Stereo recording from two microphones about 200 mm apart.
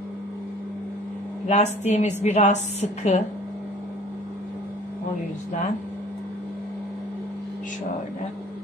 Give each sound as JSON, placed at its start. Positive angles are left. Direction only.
{"t": 1.5, "sound": "a woman's voice", "side_deg": 35}